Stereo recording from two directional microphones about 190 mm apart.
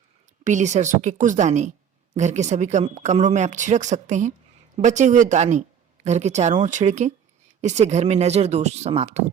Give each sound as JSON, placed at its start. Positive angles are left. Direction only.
{"t": 0.4, "sound": "speech", "side_deg": -40}